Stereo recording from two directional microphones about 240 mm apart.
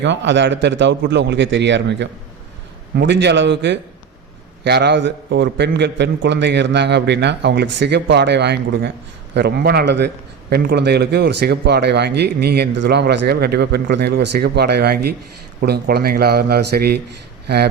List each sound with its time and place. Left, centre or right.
0.0 s a man's voice: right